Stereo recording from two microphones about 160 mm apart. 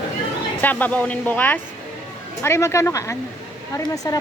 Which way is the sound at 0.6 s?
10° left (ahead or behind).